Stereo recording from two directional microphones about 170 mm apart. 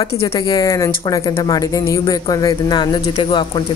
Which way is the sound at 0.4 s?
20° left (ahead or behind).